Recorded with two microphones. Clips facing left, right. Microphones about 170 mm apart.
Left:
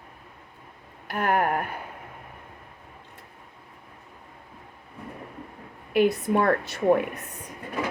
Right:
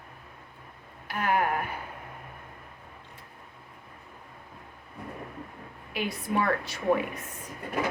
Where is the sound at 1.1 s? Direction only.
50° left (ahead or behind).